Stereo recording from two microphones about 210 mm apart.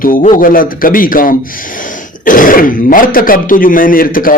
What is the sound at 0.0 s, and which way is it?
A man's voice, 40° left (ahead or behind).